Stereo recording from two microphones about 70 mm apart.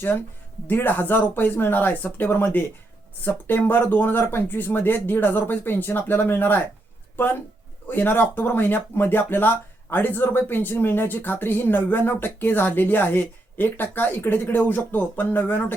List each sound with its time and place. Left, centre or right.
0.7 s speech: left